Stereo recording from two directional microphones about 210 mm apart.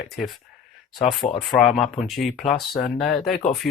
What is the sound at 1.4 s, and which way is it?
Speech, centre (ahead or behind).